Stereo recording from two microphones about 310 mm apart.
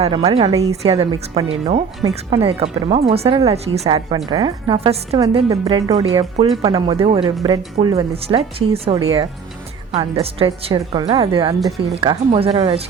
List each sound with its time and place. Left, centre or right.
0.0 s a woman's voice: centre